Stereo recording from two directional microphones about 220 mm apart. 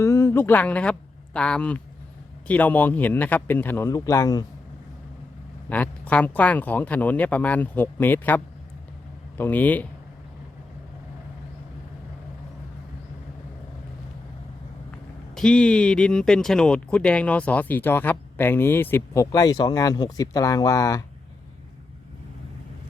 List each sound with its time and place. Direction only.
0.0 s speech: 10° left (ahead or behind)
5.6 s speech: 5° left (ahead or behind)
9.4 s speech: 5° left (ahead or behind)
15.4 s speech: 5° left (ahead or behind)